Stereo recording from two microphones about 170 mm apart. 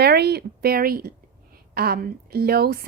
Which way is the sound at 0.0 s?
70° right (ahead or behind).